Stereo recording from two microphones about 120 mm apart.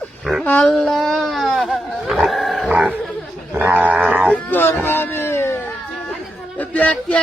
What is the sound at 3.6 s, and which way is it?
Dog, 15° right (ahead or behind).